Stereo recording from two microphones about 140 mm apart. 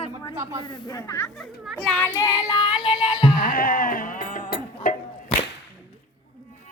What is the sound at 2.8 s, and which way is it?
Music, 35° left (ahead or behind).